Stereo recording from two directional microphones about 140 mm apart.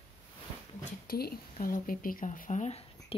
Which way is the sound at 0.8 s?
90° left.